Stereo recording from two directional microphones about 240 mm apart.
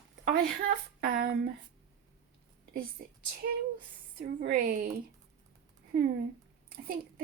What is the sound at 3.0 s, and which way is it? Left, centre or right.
Speech, right.